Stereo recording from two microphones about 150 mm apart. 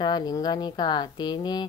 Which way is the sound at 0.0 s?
25° left (ahead or behind).